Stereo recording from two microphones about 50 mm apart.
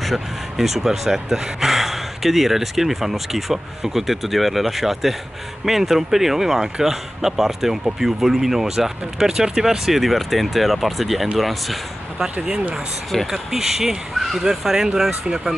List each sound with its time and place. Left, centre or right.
0.0 s speech: centre
13.3 s speech: centre